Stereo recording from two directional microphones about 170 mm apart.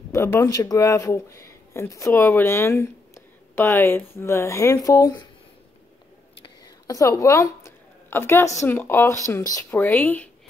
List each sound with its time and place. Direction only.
0.1 s speech: 15° left (ahead or behind)
6.6 s a woman's voice: 20° left (ahead or behind)